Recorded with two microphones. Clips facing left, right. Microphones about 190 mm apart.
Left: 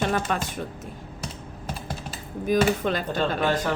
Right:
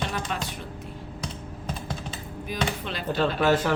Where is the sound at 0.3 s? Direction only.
45° left (ahead or behind).